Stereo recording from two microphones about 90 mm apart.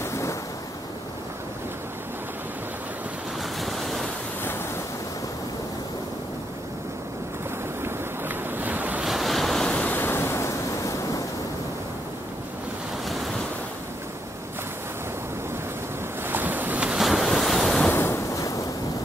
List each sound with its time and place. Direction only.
0.0 s waves: 35° left (ahead or behind)
3.6 s waves: centre (ahead or behind)
8.5 s waves: 20° right (ahead or behind)
9.0 s waves: centre (ahead or behind)
9.7 s waves: 15° left (ahead or behind)
16.3 s waves: 20° right (ahead or behind); by 17.9 s 5° left (ahead or behind)
17.9 s waves: 30° left (ahead or behind)